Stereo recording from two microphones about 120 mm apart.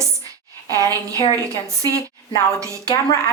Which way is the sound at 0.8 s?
30° right (ahead or behind).